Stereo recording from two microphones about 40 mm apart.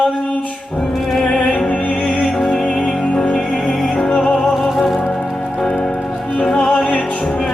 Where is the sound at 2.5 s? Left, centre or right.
Left.